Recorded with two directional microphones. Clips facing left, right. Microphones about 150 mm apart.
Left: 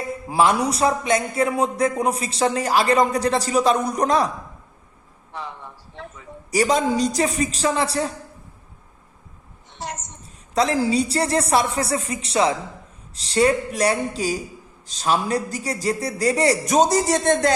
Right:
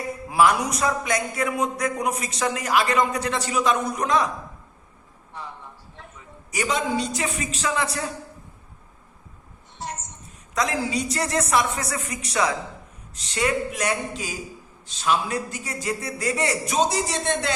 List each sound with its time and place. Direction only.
0.3 s a man's voice: 30° left (ahead or behind)
5.3 s a man's voice: 90° left
6.0 s a sound: 90° left
6.5 s a man's voice: 35° left (ahead or behind)
9.7 s a sound: 90° left
10.5 s a man's voice: 30° left (ahead or behind)